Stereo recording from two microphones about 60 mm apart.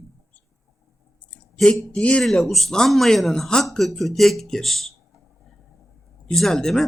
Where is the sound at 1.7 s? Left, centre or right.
Centre.